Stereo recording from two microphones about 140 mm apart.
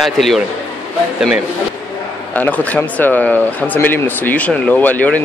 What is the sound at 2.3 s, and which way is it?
Speech, 10° left (ahead or behind).